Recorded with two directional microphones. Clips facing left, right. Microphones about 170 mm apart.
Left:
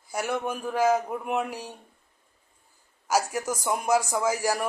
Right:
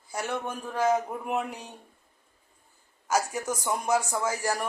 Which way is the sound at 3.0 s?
10° left (ahead or behind).